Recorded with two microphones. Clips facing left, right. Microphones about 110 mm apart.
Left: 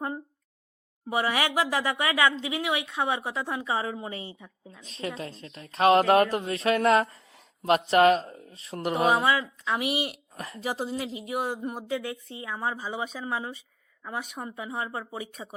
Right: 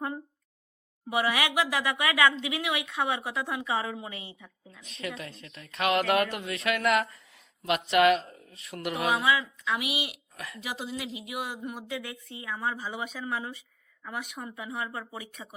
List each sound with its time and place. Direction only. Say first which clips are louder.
1.1 s speech: left 1 dB; 30° left (ahead or behind)